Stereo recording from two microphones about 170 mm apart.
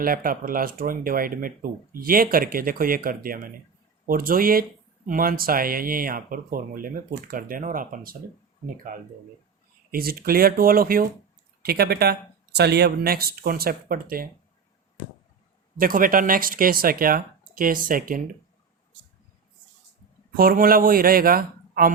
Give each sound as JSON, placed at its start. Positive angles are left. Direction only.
{"t": 0.0, "sound": "speech", "side_deg": -55}
{"t": 9.9, "sound": "speech", "side_deg": -60}
{"t": 15.8, "sound": "speech", "side_deg": -55}
{"t": 20.3, "sound": "speech", "side_deg": -60}